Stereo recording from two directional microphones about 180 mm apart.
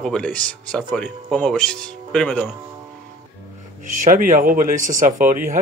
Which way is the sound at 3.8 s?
45° right (ahead or behind).